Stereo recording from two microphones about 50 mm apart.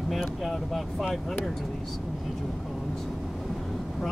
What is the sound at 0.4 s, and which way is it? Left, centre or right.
Speech, centre.